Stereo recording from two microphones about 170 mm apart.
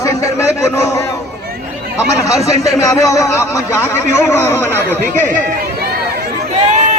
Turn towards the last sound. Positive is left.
turn(degrees=15)  # may be behind; listen again after turning